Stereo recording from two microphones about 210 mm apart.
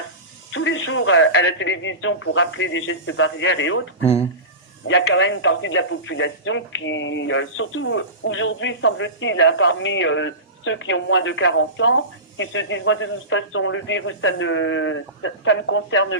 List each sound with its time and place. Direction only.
0.5 s speech: 65° left (ahead or behind)
4.9 s speech: 65° left (ahead or behind)